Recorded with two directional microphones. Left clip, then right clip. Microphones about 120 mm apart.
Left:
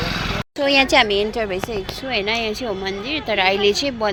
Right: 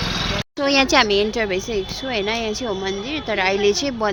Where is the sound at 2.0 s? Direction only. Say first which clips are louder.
Left 3 dB; 25° right (ahead or behind).